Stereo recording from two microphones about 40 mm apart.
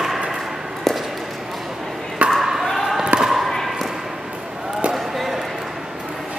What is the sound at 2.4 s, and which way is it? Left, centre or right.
Basketball bounce, centre.